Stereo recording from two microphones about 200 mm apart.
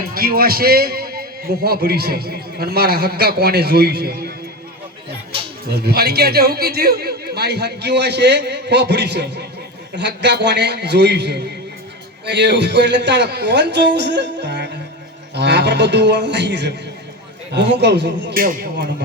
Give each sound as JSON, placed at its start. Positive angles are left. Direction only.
{"t": 0.1, "sound": "a man's voice", "side_deg": -50}
{"t": 5.6, "sound": "a man's voice", "side_deg": -50}